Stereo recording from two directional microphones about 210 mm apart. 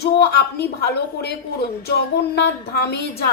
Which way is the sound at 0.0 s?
50° left (ahead or behind).